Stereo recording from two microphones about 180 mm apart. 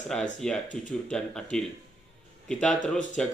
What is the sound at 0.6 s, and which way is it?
Speech, 45° left (ahead or behind).